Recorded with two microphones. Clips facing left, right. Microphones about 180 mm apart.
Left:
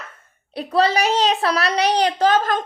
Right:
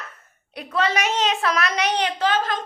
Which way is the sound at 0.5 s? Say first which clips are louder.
Left 5 dB; 35° left (ahead or behind).